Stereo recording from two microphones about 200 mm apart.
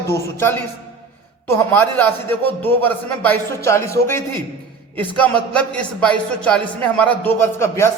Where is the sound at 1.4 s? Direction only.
10° left (ahead or behind).